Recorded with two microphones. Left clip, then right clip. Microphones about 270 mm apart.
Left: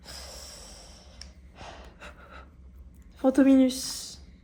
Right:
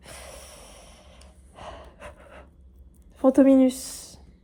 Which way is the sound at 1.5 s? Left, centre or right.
Right.